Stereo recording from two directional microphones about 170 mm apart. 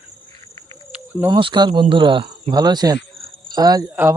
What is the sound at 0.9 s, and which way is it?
Cricket, 10° right (ahead or behind).